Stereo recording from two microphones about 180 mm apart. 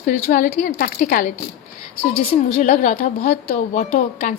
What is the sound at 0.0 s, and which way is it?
A woman's voice, 50° left (ahead or behind).